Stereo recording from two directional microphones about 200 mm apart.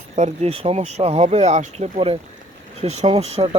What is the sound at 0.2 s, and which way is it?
Speech, 30° right (ahead or behind).